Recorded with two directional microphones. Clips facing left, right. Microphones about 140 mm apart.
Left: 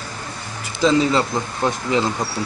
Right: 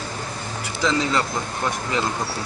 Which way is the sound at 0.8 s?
20° left (ahead or behind).